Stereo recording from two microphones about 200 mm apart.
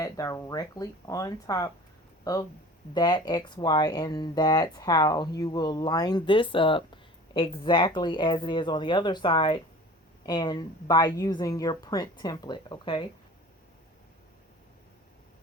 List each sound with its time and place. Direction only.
0.0 s speech: 15° left (ahead or behind)